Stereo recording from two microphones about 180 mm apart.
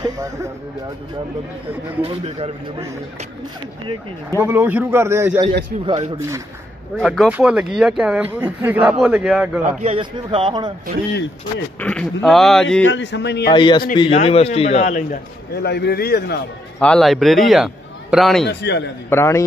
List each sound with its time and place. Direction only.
0.0 s music: 20° right (ahead or behind)
2.0 s a man's voice: 35° right (ahead or behind)
4.4 s a man's voice: 10° right (ahead or behind)
7.0 s a man's voice: centre (ahead or behind)
9.7 s a man's voice: 40° right (ahead or behind)
10.1 s speech: 30° right (ahead or behind)
11.8 s speech: 5° left (ahead or behind)
12.8 s speech: 90° left; by 13.5 s 70° left (ahead or behind)
13.5 s a man's voice: 25° left (ahead or behind); by 15.1 s 45° left (ahead or behind)
15.5 s a man's voice: 65° left (ahead or behind)
16.8 s speech: 5° left (ahead or behind)
18.5 s a man's voice: 70° left (ahead or behind)
19.0 s a man's voice: 15° left (ahead or behind)